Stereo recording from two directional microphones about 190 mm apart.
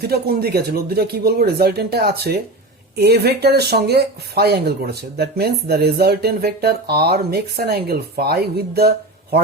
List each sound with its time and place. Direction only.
0.0 s speech: 55° right (ahead or behind)